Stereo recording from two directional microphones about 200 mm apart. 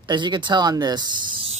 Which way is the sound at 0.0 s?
20° right (ahead or behind).